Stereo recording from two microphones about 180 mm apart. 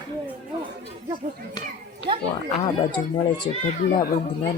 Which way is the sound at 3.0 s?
10° left (ahead or behind).